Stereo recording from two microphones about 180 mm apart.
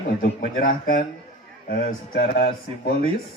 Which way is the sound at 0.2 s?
50° left (ahead or behind).